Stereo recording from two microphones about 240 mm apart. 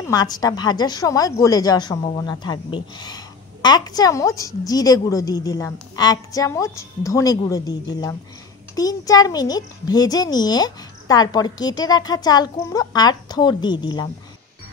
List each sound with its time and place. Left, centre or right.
0.1 s a woman's voice: centre